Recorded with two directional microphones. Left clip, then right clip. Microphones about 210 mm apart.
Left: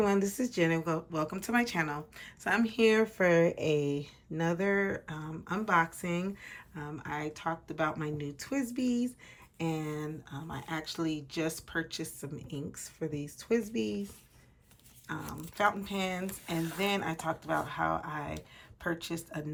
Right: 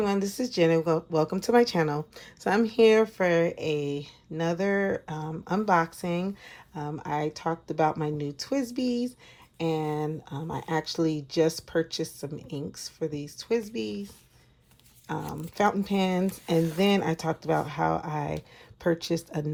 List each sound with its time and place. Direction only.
0.0 s speech: centre (ahead or behind)
3.2 s speech: centre (ahead or behind)
15.2 s speech: centre (ahead or behind)
15.5 s speech: 20° right (ahead or behind)